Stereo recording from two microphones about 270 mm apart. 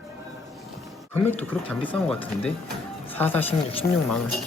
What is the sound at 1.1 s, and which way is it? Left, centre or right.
Speech, centre.